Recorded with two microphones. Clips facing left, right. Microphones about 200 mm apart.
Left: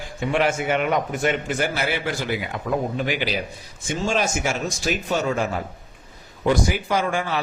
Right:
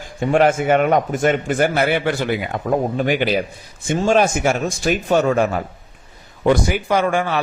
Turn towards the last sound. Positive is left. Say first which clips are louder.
# right 5 dB
turn(degrees=-60)  # may be behind; listen again after turning